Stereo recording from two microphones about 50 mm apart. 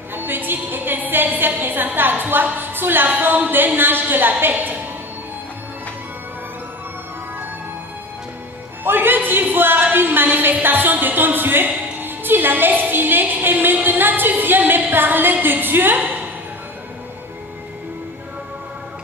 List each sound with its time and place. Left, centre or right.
0.1 s a woman's voice: right
8.8 s a sound: right
10.6 s a woman's voice: right